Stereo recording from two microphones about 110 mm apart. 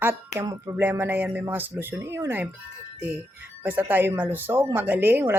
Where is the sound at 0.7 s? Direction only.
20° right (ahead or behind).